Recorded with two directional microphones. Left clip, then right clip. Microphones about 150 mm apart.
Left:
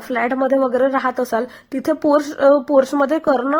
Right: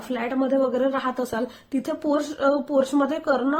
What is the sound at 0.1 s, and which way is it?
A woman's voice, 50° left (ahead or behind).